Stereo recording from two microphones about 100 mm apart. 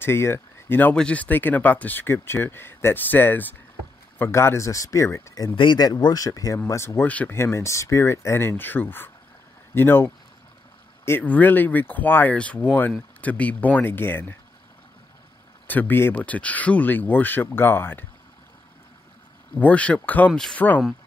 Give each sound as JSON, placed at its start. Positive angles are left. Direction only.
{"t": 0.0, "sound": "speech", "side_deg": 25}
{"t": 5.6, "sound": "speech", "side_deg": 50}
{"t": 7.1, "sound": "speech", "side_deg": 15}
{"t": 7.3, "sound": "speech", "side_deg": 25}
{"t": 15.6, "sound": "speech", "side_deg": 20}
{"t": 19.6, "sound": "speech", "side_deg": 15}
{"t": 20.3, "sound": "speech", "side_deg": 5}